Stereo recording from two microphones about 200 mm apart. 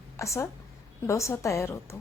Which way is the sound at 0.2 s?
15° left (ahead or behind).